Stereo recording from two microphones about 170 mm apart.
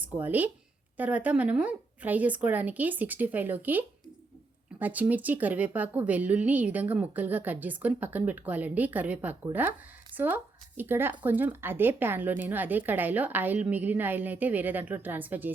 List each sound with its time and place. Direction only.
0.0 s speech: 10° right (ahead or behind)